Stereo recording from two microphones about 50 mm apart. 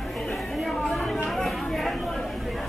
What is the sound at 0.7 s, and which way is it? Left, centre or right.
Chatter, centre.